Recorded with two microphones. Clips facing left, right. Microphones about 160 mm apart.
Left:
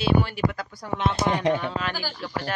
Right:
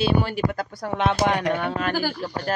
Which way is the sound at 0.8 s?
70° right (ahead or behind).